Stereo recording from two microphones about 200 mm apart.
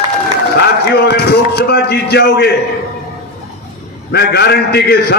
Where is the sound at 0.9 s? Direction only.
55° left (ahead or behind).